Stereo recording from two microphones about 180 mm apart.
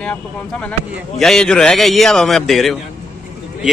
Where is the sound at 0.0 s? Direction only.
5° left (ahead or behind).